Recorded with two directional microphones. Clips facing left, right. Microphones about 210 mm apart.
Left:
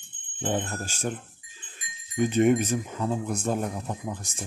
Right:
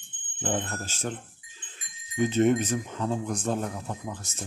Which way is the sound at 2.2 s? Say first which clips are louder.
Left 1 dB; 15° left (ahead or behind).